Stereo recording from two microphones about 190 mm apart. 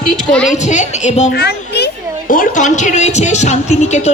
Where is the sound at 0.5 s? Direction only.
40° left (ahead or behind).